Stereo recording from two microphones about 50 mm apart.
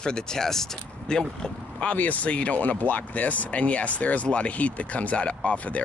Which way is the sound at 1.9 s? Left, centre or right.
Left.